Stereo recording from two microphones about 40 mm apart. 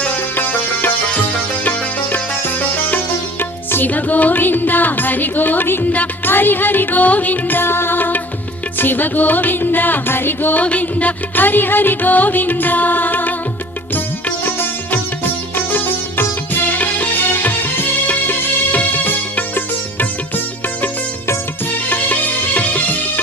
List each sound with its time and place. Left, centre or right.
3.8 s music: left
7.6 s music: left
10.5 s music: left
11.3 s music: left
14.4 s music: left
16.7 s music: left
21.8 s music: left